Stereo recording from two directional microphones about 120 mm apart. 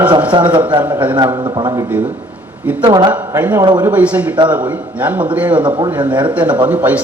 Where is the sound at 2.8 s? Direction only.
40° right (ahead or behind).